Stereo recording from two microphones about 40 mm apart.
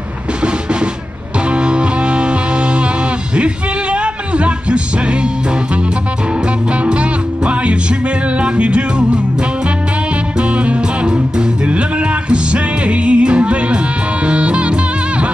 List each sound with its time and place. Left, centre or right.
0.4 s music: right
6.7 s music: right
10.3 s music: right